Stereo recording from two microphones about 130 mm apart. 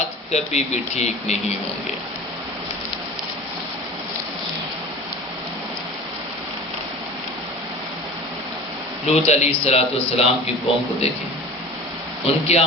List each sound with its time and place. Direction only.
0.3 s speech: 55° left (ahead or behind)
9.0 s a man's voice: 55° left (ahead or behind)
12.2 s a man's voice: 50° left (ahead or behind)